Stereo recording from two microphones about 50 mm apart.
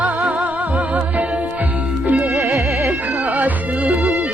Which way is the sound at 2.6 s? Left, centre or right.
Right.